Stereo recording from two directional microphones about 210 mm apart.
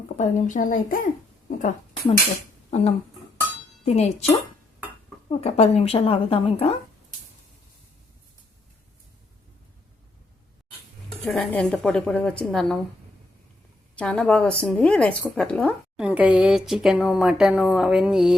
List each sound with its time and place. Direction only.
0.2 s speech: 40° left (ahead or behind)
2.6 s a sound: 30° left (ahead or behind)
3.8 s speech: 30° left (ahead or behind)
5.4 s a woman's voice: 30° left (ahead or behind)
11.3 s speech: 5° left (ahead or behind)
13.9 s speech: 5° left (ahead or behind)
16.0 s speech: 5° right (ahead or behind)